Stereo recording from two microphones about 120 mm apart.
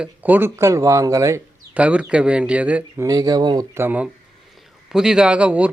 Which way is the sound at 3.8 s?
15° right (ahead or behind).